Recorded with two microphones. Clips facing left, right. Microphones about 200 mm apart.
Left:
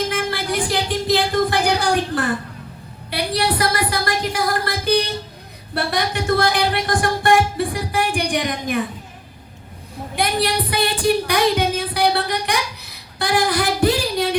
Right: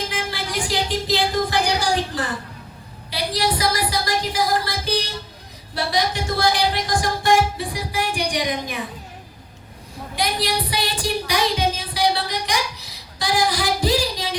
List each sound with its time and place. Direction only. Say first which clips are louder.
0.1 s music: left 5 dB; 55° left (ahead or behind)
3.1 s speech: left 2 dB; 60° left (ahead or behind)
10.2 s music: left 3 dB; 55° left (ahead or behind)